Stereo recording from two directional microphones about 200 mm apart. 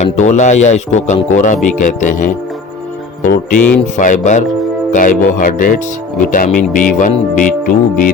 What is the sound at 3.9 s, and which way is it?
A man's voice, 40° left (ahead or behind).